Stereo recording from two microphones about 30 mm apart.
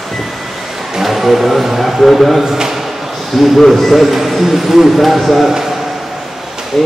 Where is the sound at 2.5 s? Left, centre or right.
Centre.